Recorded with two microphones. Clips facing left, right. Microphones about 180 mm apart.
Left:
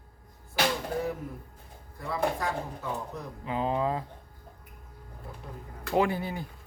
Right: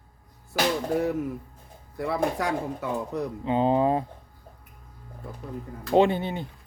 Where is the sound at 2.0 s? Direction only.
75° right (ahead or behind).